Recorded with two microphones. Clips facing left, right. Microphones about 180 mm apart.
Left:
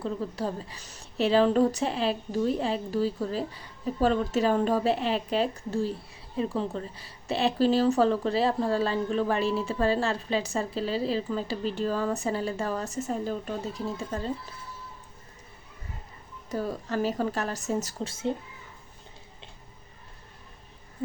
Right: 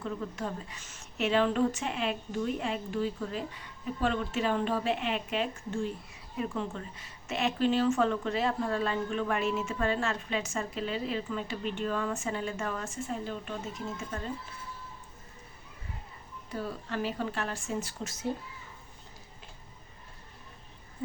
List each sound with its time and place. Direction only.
0.0 s a woman's voice: 30° left (ahead or behind)
16.5 s a woman's voice: 40° left (ahead or behind)
18.1 s speech: 25° left (ahead or behind)